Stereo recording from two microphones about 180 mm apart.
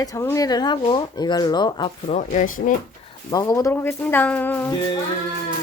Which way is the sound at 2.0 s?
40° left (ahead or behind).